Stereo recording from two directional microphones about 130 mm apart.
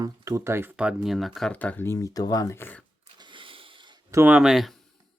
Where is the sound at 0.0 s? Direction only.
25° right (ahead or behind).